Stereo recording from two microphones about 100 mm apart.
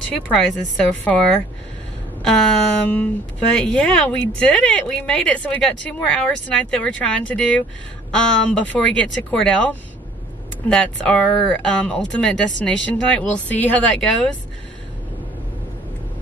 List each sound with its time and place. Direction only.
0.1 s a woman's voice: 5° left (ahead or behind)